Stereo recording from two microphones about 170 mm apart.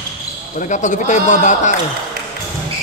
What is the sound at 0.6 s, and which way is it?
Speech, 45° left (ahead or behind).